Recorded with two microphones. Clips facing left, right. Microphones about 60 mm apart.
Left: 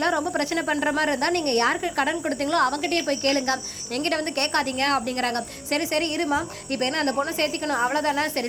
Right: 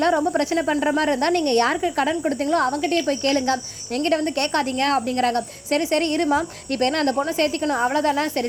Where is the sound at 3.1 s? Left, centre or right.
Left.